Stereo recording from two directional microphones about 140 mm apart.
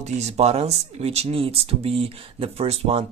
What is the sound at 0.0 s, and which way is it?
Speech, 50° right (ahead or behind).